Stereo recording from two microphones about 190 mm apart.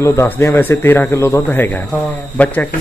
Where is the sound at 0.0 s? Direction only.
15° left (ahead or behind).